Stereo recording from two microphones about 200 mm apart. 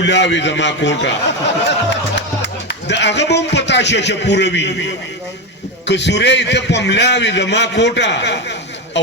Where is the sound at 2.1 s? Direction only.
60° left (ahead or behind).